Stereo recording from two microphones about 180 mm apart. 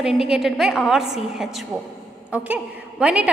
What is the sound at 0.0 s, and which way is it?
A woman's voice, 5° right (ahead or behind).